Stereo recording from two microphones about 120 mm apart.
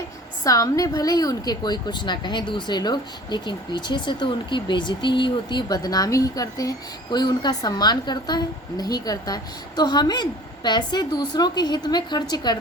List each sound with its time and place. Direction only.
0.4 s a woman's voice: 30° left (ahead or behind)